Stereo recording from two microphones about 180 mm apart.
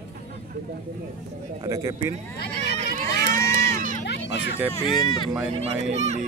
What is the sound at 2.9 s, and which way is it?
Crowd, 45° right (ahead or behind).